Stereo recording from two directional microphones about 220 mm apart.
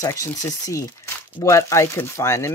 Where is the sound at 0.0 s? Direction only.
15° left (ahead or behind).